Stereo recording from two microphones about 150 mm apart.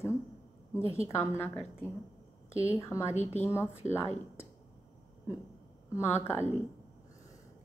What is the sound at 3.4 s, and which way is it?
A woman's voice, 15° left (ahead or behind).